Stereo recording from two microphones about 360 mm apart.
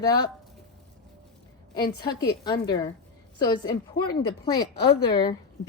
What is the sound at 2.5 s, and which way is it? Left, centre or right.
A woman's voice, centre.